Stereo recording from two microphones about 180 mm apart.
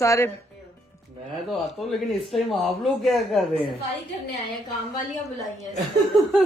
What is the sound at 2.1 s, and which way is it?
A man's voice, centre (ahead or behind).